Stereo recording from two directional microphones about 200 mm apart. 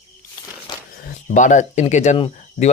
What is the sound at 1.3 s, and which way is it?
Speech, 40° left (ahead or behind).